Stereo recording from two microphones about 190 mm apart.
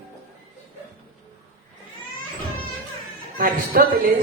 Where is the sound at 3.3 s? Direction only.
50° right (ahead or behind).